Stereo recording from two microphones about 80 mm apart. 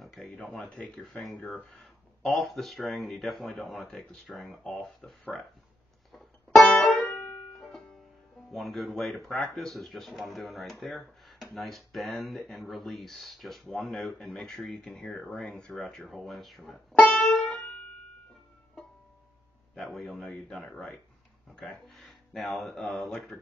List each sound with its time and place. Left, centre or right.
0.0 s speech: centre
7.0 s music: centre
8.5 s speech: centre
16.9 s music: centre
20.0 s speech: centre